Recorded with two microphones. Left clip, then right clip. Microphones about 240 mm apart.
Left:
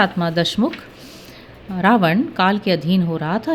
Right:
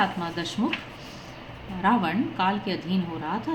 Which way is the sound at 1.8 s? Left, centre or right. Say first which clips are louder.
Left 8 dB; left.